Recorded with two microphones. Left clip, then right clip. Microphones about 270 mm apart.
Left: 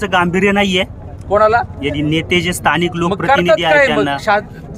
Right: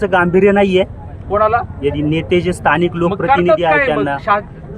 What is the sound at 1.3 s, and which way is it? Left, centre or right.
Speech, centre.